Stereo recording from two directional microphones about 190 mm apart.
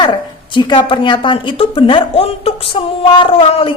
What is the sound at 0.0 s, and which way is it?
A woman's voice, 25° left (ahead or behind).